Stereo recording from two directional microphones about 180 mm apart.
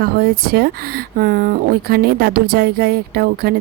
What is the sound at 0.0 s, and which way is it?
Speech, 60° right (ahead or behind).